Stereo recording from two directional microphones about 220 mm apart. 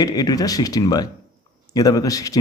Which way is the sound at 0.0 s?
15° left (ahead or behind).